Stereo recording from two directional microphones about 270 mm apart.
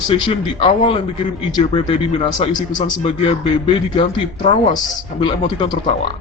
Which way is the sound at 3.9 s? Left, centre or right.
Centre.